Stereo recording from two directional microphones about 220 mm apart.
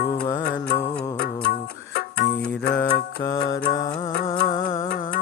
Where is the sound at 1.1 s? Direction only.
45° left (ahead or behind).